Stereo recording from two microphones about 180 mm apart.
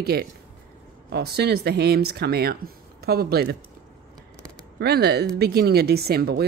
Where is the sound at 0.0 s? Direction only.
60° right (ahead or behind).